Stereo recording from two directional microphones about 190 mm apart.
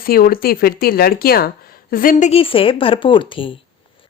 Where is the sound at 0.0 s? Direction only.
50° left (ahead or behind).